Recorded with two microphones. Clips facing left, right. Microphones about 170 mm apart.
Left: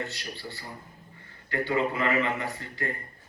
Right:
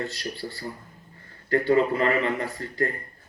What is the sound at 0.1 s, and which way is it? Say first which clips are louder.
A man's voice: right 5 dB; 40° right (ahead or behind).